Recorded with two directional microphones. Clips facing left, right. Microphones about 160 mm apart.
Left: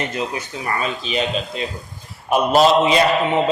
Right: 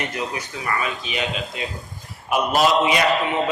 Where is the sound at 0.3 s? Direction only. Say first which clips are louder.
Left 2 dB; 30° left (ahead or behind).